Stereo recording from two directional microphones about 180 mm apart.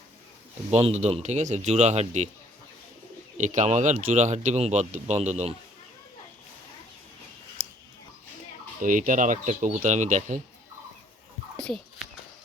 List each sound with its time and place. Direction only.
0.7 s speech: 35° right (ahead or behind)
3.3 s speech: 45° right (ahead or behind)
8.8 s speech: 45° right (ahead or behind)
11.5 s a sound: 5° left (ahead or behind)